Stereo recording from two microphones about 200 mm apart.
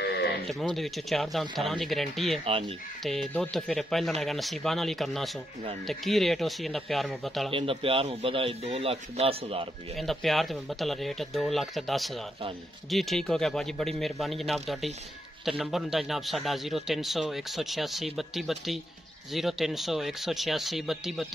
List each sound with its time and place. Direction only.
0.5 s a man's voice: centre (ahead or behind)
7.5 s speech: 25° right (ahead or behind)
9.9 s a man's voice: centre (ahead or behind)